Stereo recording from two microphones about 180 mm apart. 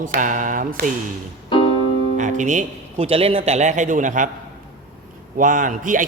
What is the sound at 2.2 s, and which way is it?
Speech, 45° right (ahead or behind).